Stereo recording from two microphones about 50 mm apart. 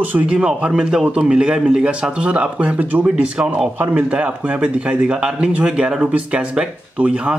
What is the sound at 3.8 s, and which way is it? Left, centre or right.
Speech, right.